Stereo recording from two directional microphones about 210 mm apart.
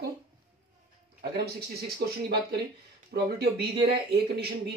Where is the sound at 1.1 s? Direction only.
50° right (ahead or behind).